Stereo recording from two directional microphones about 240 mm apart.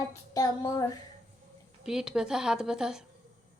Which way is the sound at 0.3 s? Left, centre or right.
Centre.